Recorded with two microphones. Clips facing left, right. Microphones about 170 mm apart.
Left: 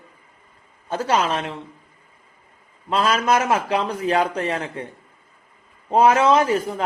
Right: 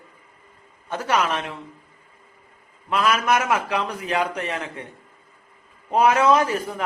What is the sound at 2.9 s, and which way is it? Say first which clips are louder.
A man's voice: left 1 dB; 30° left (ahead or behind).